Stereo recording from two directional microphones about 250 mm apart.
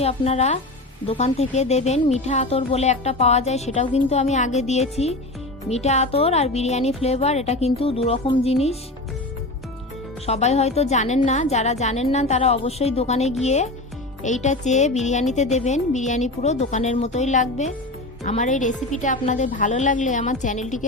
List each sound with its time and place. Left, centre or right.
0.0 s speech: left
10.2 s speech: left